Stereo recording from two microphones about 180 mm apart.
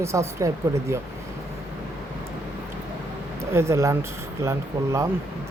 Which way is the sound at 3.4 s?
15° right (ahead or behind).